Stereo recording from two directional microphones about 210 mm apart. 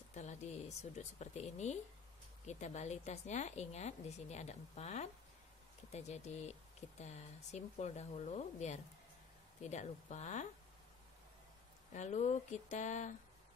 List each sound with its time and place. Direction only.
0.1 s a woman's voice: 35° left (ahead or behind)
11.9 s a woman's voice: 35° left (ahead or behind)